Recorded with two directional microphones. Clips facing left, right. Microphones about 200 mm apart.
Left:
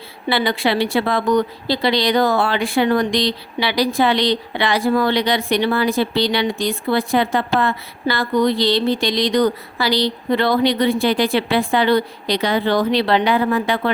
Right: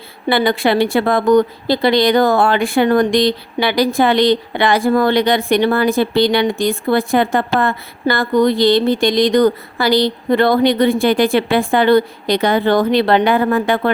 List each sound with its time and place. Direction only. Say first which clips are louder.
0.3 s speech: right 4 dB; 50° right (ahead or behind)